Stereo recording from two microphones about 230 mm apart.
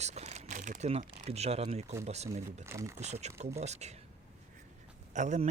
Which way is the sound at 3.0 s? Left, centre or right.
Right.